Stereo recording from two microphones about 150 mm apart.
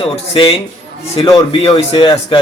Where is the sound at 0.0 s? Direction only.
35° left (ahead or behind).